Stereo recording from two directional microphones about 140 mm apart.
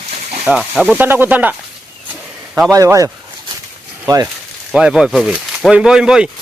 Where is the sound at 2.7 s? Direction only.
25° right (ahead or behind).